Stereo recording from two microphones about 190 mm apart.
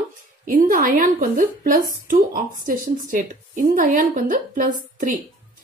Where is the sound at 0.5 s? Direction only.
45° right (ahead or behind).